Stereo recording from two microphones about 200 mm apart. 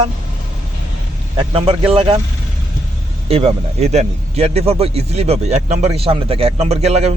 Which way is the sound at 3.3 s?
30° right (ahead or behind).